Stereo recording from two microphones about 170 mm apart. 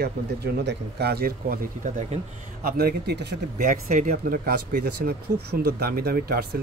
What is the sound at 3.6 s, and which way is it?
Speech, 50° right (ahead or behind).